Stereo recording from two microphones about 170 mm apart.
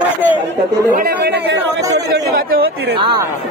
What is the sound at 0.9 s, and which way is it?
Speech, 55° right (ahead or behind).